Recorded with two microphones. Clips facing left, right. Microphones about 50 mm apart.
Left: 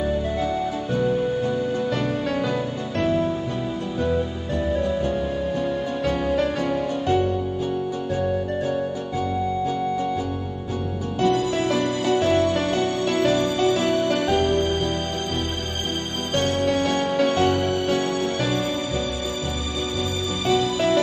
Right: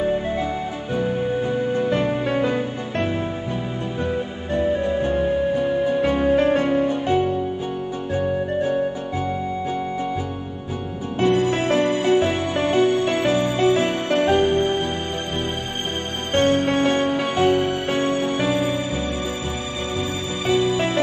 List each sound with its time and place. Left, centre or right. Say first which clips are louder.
0.0 s music: right 2 dB; right
5.5 s music: right 5 dB; centre
16.3 s music: right 4 dB; right
20.4 s music: right 1 dB; right